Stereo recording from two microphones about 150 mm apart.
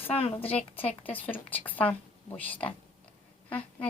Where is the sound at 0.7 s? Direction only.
10° left (ahead or behind).